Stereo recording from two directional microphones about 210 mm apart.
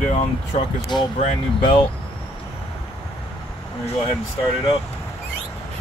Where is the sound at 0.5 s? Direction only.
30° left (ahead or behind).